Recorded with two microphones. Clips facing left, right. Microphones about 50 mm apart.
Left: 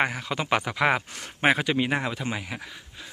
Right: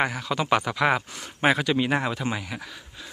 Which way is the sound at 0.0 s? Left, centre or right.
Left.